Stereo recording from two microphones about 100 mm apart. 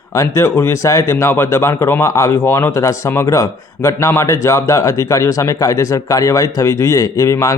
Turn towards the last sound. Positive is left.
turn(degrees=30)  # may be behind; listen again after turning